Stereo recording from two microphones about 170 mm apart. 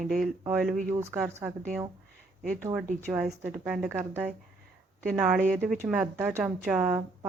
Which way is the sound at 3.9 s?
15° right (ahead or behind).